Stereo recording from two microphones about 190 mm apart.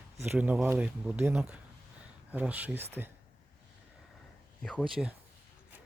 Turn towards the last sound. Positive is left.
turn(degrees=0)  # may be behind; listen again after turning